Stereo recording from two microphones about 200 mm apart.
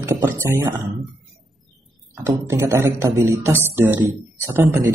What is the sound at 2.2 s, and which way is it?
Music, 15° right (ahead or behind).